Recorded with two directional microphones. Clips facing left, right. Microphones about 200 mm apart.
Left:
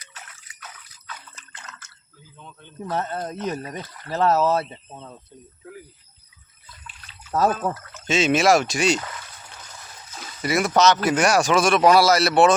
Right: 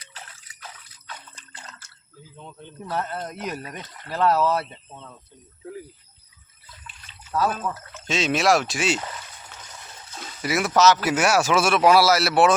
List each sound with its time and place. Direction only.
0.0 s drip: 30° right (ahead or behind)
2.3 s speech: 30° right (ahead or behind)
2.9 s speech: 25° left (ahead or behind)
7.3 s speech: 45° left (ahead or behind)
8.0 s speech: centre (ahead or behind)
10.2 s speech: 5° right (ahead or behind)